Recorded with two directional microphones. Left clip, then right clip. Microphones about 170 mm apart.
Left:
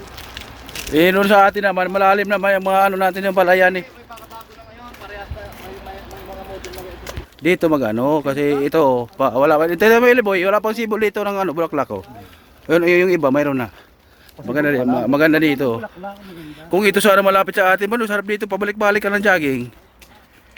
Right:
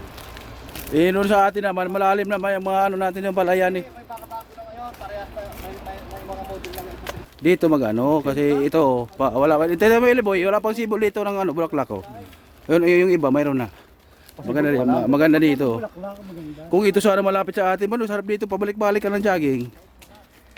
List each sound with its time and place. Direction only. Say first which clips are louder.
0.9 s speech: left 5 dB; 20° left (ahead or behind); by 3.8 s 5° left (ahead or behind)
6.7 s speech: even; centre (ahead or behind)